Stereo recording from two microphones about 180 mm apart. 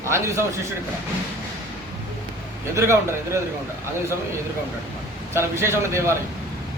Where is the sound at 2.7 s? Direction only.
15° right (ahead or behind).